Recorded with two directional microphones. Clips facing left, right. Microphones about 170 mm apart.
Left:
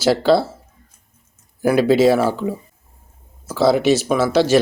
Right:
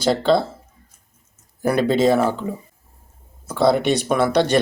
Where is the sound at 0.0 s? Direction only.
5° left (ahead or behind).